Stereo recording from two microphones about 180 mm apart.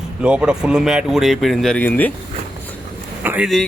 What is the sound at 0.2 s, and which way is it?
Speech, 5° right (ahead or behind).